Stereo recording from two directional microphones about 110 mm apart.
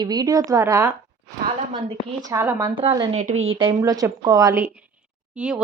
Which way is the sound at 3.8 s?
30° right (ahead or behind).